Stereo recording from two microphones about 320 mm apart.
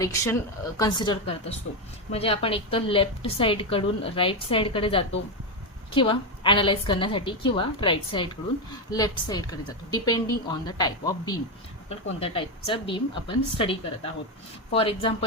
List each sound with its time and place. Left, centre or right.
0.0 s a woman's voice: centre